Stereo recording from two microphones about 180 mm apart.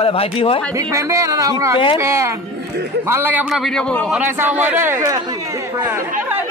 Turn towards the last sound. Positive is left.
turn(degrees=-15)  # may be behind; listen again after turning